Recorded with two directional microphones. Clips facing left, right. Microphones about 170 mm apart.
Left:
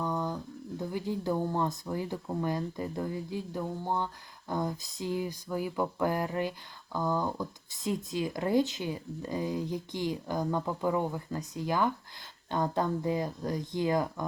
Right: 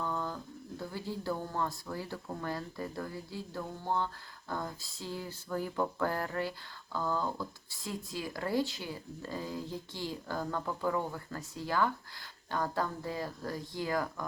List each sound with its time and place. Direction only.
0.0 s speech: 15° left (ahead or behind)